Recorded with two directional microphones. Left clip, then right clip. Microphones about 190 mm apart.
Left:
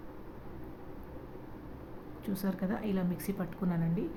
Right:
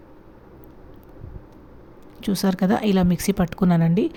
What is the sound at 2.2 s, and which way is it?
Speech, 50° right (ahead or behind).